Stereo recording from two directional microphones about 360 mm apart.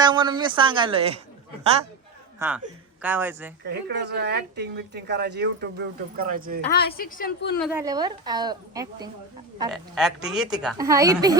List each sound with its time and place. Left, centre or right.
0.0 s a woman's voice: centre
2.4 s a woman's voice: centre
3.6 s speech: right
6.7 s a woman's voice: left
7.6 s a woman's voice: centre